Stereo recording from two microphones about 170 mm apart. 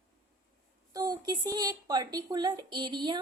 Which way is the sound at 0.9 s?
20° right (ahead or behind).